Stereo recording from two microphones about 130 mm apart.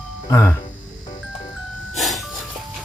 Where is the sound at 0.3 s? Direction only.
25° left (ahead or behind).